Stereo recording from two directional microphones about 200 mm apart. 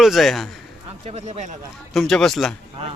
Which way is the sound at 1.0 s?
35° right (ahead or behind).